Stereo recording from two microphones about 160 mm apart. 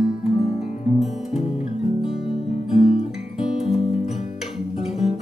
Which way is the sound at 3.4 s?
Centre (ahead or behind).